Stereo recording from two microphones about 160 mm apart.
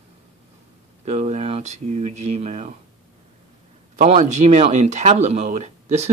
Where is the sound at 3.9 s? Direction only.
45° right (ahead or behind).